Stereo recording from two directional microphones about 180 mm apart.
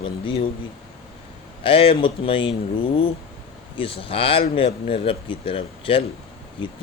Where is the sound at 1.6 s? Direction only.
30° left (ahead or behind).